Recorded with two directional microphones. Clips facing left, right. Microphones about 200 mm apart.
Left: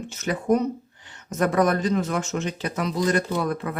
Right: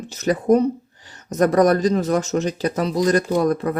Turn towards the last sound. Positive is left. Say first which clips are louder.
# right 7 dB
turn(degrees=-40)  # may be behind; listen again after turning